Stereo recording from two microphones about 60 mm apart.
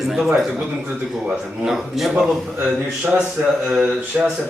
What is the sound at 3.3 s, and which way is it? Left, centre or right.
Speech, centre.